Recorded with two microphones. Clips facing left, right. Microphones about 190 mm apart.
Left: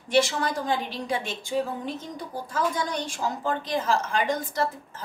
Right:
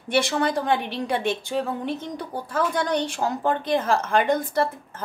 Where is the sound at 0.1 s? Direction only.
60° right (ahead or behind).